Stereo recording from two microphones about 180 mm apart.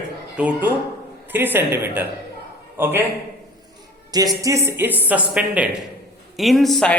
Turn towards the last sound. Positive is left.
turn(degrees=0)  # may be behind; listen again after turning